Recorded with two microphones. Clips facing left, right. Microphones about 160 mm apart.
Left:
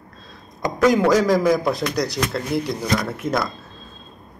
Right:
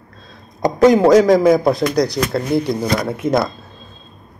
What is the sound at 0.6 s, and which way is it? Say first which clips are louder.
Speech: right 6 dB; 30° right (ahead or behind).